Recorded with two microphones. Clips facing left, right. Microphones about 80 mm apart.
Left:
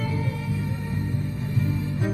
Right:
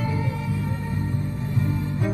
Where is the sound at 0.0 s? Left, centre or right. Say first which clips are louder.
Right 2 dB; right.